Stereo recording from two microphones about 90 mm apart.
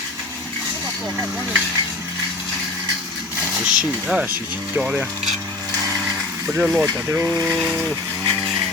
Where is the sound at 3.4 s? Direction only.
10° right (ahead or behind).